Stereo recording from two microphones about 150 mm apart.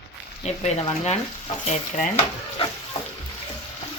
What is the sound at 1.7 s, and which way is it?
Speech, 55° left (ahead or behind).